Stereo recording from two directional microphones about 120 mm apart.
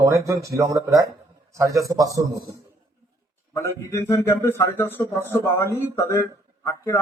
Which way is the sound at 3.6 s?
20° left (ahead or behind).